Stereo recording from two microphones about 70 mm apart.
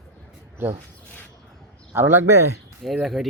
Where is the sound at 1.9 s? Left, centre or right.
Right.